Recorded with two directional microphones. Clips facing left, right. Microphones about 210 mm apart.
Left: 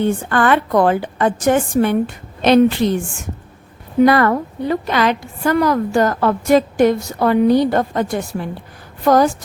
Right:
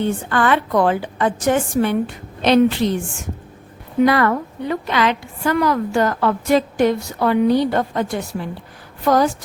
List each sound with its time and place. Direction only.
0.0 s a woman's voice: 50° left (ahead or behind)
4.0 s a woman's voice: 45° left (ahead or behind)